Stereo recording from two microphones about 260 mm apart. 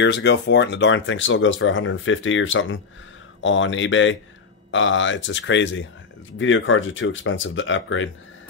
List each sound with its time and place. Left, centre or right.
0.0 s speech: left